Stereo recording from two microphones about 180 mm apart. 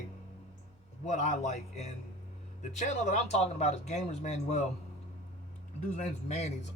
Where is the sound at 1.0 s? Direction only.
40° left (ahead or behind).